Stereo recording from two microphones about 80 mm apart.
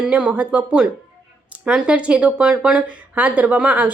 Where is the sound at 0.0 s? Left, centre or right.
Centre.